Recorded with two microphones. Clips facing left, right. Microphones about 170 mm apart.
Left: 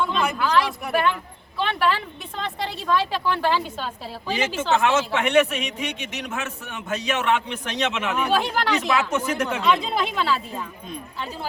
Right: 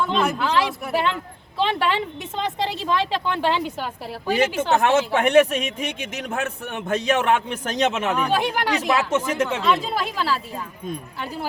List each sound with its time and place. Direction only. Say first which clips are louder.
0.1 s a sound: right 1 dB; 25° right (ahead or behind)
1.5 s a woman's voice: right 1 dB; 25° right (ahead or behind)
4.8 s a man's voice: right 3 dB; 45° right (ahead or behind)
8.3 s speech: even; 15° right (ahead or behind)
8.9 s a woman's voice: right 1 dB; 30° right (ahead or behind)
9.6 s speech: even; centre (ahead or behind)